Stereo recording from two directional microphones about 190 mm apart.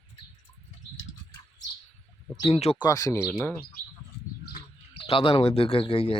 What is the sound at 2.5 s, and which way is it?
Speech, 35° left (ahead or behind).